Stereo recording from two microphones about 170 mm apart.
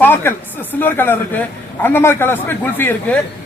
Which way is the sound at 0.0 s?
15° left (ahead or behind).